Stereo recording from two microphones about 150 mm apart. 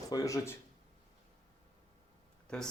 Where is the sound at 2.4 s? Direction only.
5° left (ahead or behind).